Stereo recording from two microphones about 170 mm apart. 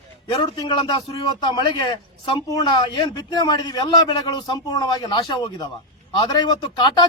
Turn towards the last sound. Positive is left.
turn(degrees=25)  # may be behind; listen again after turning